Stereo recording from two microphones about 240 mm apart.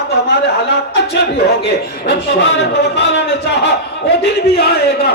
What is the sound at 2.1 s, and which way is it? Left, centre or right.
A man's voice, left.